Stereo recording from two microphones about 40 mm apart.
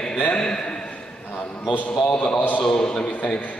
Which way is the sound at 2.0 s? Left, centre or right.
Left.